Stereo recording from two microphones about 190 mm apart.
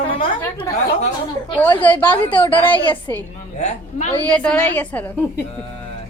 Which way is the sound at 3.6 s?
35° left (ahead or behind).